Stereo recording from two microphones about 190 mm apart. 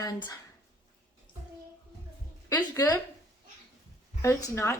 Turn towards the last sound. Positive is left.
turn(degrees=15)  # may be behind; listen again after turning